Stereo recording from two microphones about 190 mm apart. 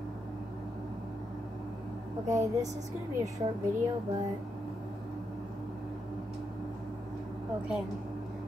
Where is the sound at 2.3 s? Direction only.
15° right (ahead or behind).